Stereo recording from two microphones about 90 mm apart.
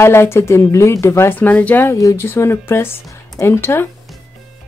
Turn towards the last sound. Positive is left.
turn(degrees=25)  # may be behind; listen again after turning